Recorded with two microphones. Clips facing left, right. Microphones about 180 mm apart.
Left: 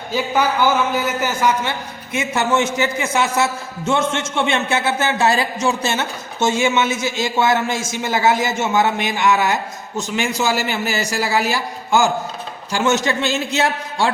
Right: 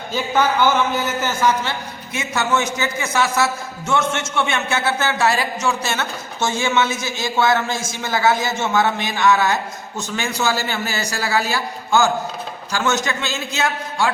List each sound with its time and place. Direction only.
0.1 s a man's voice: 10° left (ahead or behind)
2.1 s a man's voice: 25° left (ahead or behind); by 12.1 s 10° left (ahead or behind)
12.7 s a man's voice: 25° left (ahead or behind)